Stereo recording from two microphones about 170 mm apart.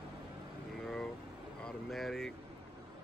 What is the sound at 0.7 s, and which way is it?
Vehicle, centre (ahead or behind).